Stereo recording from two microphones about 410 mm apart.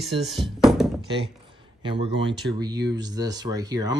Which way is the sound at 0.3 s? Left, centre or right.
Centre.